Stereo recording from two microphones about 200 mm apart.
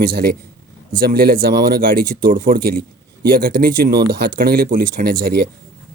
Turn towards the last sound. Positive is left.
turn(degrees=-50)  # may be behind; listen again after turning